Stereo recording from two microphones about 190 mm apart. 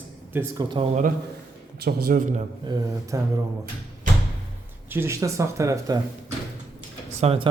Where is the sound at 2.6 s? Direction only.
20° right (ahead or behind).